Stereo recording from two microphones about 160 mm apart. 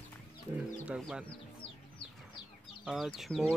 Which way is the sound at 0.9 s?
5° right (ahead or behind).